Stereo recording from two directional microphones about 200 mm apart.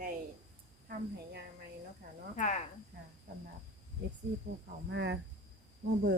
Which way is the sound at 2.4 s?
40° left (ahead or behind).